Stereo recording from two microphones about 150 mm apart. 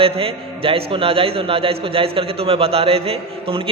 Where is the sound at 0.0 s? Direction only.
40° right (ahead or behind).